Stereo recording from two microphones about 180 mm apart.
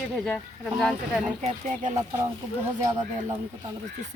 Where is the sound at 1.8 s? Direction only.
45° right (ahead or behind).